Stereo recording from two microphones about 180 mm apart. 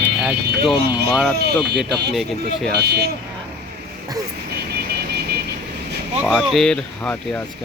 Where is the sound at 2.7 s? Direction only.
65° right (ahead or behind).